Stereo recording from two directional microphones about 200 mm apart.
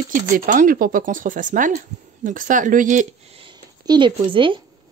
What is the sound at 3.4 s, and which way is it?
Speech, 25° right (ahead or behind).